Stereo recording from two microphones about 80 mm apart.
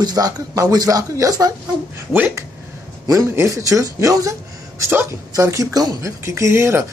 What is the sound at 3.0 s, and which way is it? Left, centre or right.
A man's voice, right.